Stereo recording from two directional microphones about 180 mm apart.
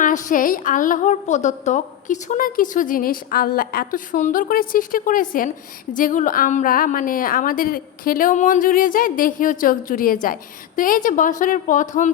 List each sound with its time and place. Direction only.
0.0 s a woman's voice: 45° left (ahead or behind)